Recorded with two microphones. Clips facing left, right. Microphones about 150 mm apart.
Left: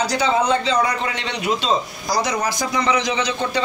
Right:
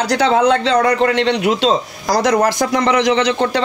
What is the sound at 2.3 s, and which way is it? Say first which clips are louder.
A man's voice: right 8 dB; 55° right (ahead or behind).